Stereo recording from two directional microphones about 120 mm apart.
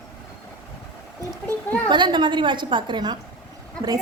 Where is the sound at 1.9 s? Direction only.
40° right (ahead or behind).